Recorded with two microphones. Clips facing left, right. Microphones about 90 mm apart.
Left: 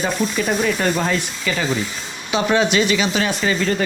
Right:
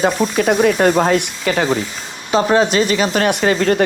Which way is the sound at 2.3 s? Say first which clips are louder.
Right 4 dB; 40° right (ahead or behind).